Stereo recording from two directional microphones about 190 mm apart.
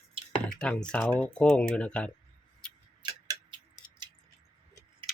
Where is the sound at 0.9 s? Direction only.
5° left (ahead or behind).